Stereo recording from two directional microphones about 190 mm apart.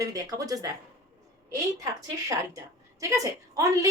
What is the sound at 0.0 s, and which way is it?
A woman's voice, 20° right (ahead or behind).